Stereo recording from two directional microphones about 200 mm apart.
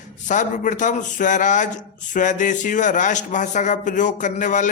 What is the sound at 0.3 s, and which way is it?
Speech, 40° left (ahead or behind).